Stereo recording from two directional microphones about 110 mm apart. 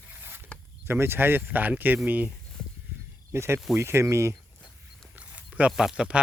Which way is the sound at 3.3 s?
25° right (ahead or behind).